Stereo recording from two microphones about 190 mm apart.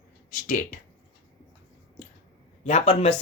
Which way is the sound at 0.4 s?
40° left (ahead or behind).